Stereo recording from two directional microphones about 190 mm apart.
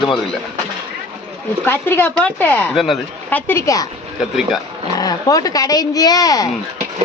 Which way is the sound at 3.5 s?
15° left (ahead or behind).